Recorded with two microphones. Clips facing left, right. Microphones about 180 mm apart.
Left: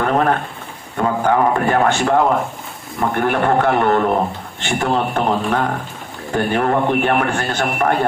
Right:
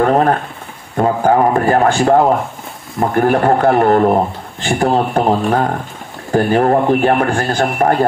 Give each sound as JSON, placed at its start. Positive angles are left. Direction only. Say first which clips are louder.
{"t": 0.0, "sound": "a man's voice", "louder": "right 4 dB", "side_deg": -35}